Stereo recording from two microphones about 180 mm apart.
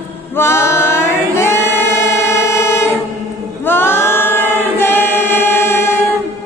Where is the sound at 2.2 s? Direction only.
15° left (ahead or behind).